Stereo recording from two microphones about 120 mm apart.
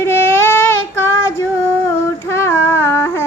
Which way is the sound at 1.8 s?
20° left (ahead or behind).